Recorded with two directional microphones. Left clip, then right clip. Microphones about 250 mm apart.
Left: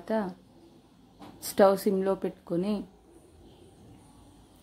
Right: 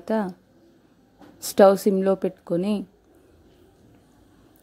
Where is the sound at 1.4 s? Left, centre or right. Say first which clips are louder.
Right 6 dB; right.